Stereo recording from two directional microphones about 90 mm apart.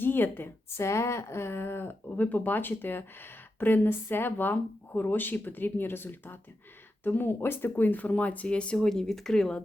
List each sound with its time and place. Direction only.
0.0 s a woman's voice: 25° left (ahead or behind)